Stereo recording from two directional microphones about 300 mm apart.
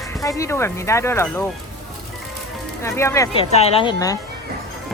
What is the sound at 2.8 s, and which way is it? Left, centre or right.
Speech, centre.